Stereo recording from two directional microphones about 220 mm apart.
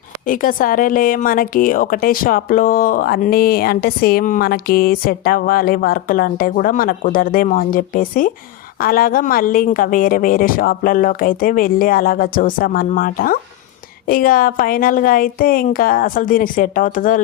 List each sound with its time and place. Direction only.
0.3 s a woman's voice: 40° left (ahead or behind)